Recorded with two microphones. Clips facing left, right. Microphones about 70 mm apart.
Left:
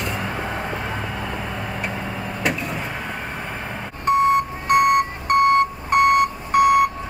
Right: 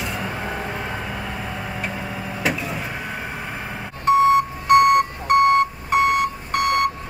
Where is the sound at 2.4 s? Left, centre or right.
Centre.